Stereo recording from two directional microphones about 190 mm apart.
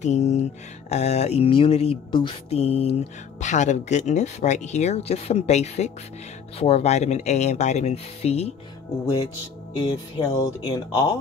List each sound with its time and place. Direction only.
0.0 s speech: 35° left (ahead or behind)
10.1 s speech: 20° left (ahead or behind)